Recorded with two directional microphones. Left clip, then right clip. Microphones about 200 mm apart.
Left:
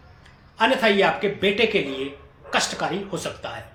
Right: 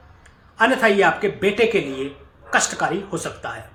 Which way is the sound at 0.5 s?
15° right (ahead or behind).